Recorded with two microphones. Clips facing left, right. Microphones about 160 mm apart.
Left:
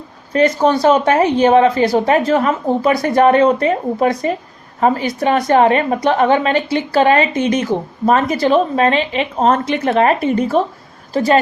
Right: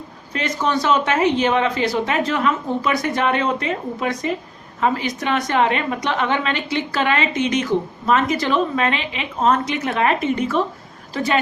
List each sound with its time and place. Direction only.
0.3 s a woman's voice: 35° left (ahead or behind); by 9.9 s 55° left (ahead or behind)
9.9 s a woman's voice: 40° left (ahead or behind)